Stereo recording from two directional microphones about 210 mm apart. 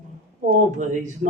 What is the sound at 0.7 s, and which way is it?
Speech, 35° right (ahead or behind).